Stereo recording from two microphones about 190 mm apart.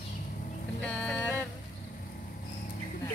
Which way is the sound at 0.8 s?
5° left (ahead or behind).